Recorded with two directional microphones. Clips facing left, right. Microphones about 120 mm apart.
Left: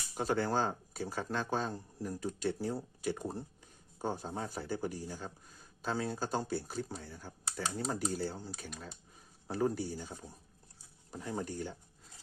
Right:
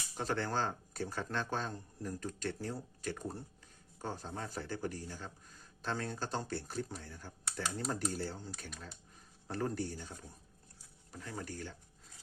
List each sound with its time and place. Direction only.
0.1 s speech: 10° left (ahead or behind)